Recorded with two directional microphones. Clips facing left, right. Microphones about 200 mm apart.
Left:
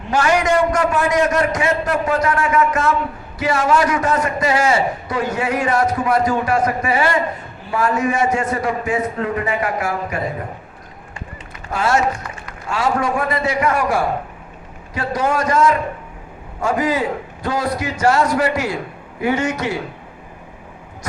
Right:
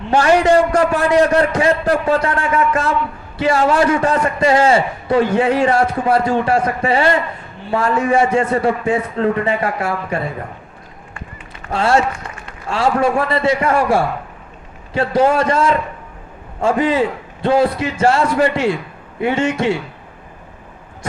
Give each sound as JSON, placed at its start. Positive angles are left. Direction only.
{"t": 0.1, "sound": "a man's voice", "side_deg": -30}
{"t": 11.7, "sound": "a man's voice", "side_deg": -30}